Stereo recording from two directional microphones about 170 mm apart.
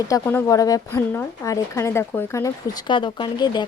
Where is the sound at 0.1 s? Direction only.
15° left (ahead or behind).